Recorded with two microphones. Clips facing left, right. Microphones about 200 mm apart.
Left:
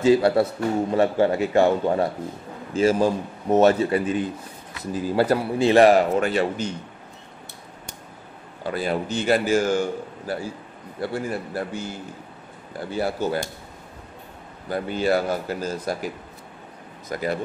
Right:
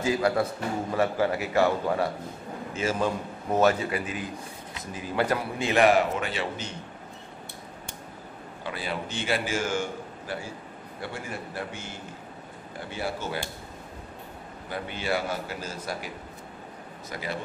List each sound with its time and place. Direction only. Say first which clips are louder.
0.0 s a man's voice: left 7 dB; 30° left (ahead or behind); by 6.7 s 45° left (ahead or behind)
8.6 s a man's voice: left 8 dB; 45° left (ahead or behind)
12.9 s a man's voice: left 8 dB; 40° left (ahead or behind)
14.7 s a man's voice: left 8 dB; 40° left (ahead or behind)
17.1 s a man's voice: left 8 dB; 45° left (ahead or behind)